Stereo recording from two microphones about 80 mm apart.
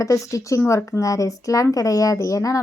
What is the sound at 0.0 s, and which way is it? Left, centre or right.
Speech, left.